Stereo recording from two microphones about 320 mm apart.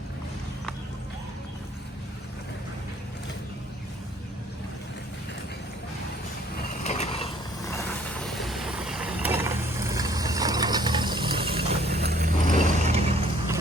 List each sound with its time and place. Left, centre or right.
6.8 s vehicle: left; by 11.5 s centre
11.9 s vehicle: right